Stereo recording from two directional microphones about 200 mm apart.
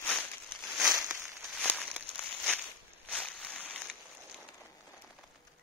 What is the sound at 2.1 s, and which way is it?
Walk, 5° left (ahead or behind).